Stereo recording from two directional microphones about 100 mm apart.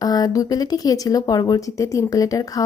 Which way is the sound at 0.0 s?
40° left (ahead or behind).